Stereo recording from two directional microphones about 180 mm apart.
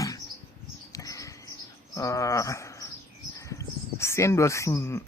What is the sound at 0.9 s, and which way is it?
Bird, 20° left (ahead or behind).